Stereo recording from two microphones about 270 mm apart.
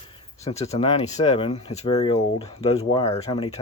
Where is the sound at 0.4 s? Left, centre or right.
Left.